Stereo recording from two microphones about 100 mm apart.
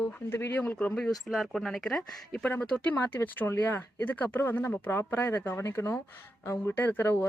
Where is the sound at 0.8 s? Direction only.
5° left (ahead or behind).